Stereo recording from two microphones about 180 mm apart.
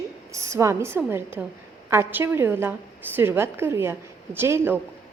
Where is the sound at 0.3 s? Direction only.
15° right (ahead or behind).